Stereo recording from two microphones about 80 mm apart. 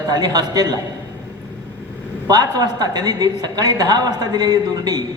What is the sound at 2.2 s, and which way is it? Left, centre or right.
A woman's voice, right.